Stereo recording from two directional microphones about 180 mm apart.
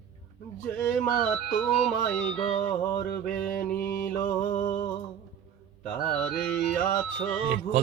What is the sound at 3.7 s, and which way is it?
Mantra, 55° left (ahead or behind).